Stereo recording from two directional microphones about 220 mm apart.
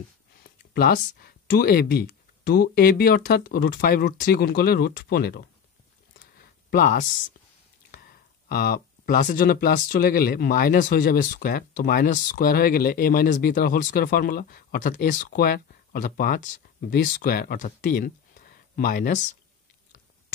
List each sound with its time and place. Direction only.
0.7 s speech: 45° left (ahead or behind)
6.1 s a sound: 40° left (ahead or behind)
7.9 s speech: 40° left (ahead or behind)